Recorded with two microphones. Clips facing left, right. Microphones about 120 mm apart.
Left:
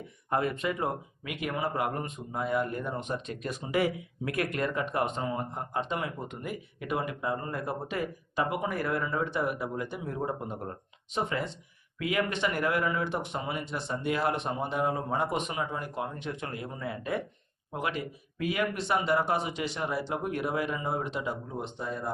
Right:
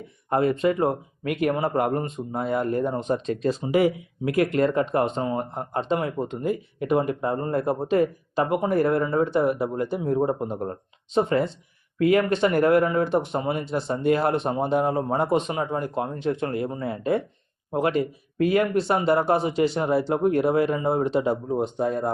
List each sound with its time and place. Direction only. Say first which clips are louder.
0.3 s speech: right 8 dB; 30° right (ahead or behind)
7.1 s speech: right 8 dB; 45° right (ahead or behind)
9.6 s speech: right 8 dB; 50° right (ahead or behind)
9.9 s speech: right 10 dB; 35° right (ahead or behind)
18.6 s speech: right 7 dB; 35° right (ahead or behind)